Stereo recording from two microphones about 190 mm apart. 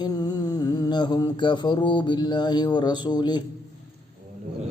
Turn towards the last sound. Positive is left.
turn(degrees=20)  # may be behind; listen again after turning